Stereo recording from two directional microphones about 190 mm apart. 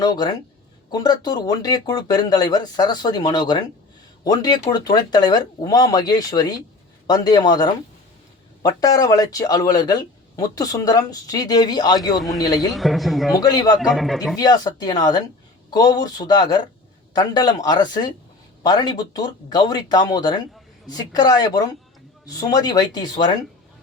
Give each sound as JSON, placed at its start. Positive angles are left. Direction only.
{"t": 0.0, "sound": "speech", "side_deg": 20}
{"t": 12.7, "sound": "speech", "side_deg": 0}
{"t": 13.3, "sound": "speech", "side_deg": 20}
{"t": 13.8, "sound": "speech", "side_deg": 0}
{"t": 14.3, "sound": "speech", "side_deg": 20}